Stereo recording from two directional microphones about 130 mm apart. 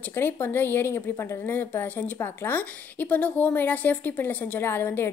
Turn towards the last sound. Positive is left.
turn(degrees=15)  # may be behind; listen again after turning